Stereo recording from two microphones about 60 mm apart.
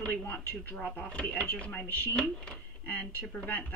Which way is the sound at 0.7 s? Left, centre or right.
Left.